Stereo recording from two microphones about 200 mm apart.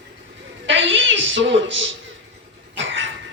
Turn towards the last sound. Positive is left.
turn(degrees=-70)  # may be behind; listen again after turning